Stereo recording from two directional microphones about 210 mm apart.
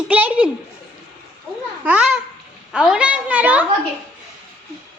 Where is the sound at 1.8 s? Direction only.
5° right (ahead or behind).